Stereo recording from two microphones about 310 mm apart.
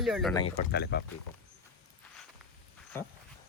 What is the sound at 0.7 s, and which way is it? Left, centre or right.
Speech, left.